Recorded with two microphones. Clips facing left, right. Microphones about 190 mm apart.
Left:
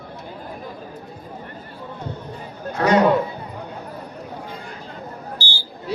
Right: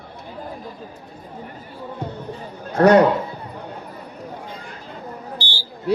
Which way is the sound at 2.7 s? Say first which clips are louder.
Right 5 dB; 60° right (ahead or behind).